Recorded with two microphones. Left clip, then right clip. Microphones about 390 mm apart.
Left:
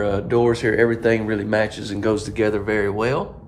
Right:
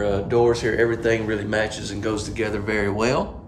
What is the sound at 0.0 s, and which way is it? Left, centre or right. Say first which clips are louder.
Speech: even; centre.